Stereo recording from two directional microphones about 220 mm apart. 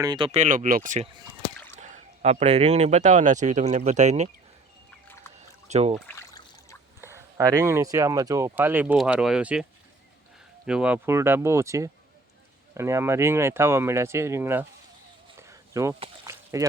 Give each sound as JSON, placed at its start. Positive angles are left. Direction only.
{"t": 0.0, "sound": "speech", "side_deg": -20}
{"t": 5.6, "sound": "speech", "side_deg": -30}
{"t": 6.1, "sound": "a sound", "side_deg": 15}
{"t": 7.0, "sound": "speech", "side_deg": -15}
{"t": 10.7, "sound": "speech", "side_deg": -5}
{"t": 15.4, "sound": "a sound", "side_deg": -15}